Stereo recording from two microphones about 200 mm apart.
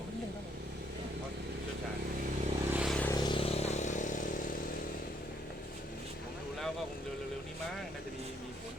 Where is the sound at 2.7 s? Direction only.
Centre (ahead or behind).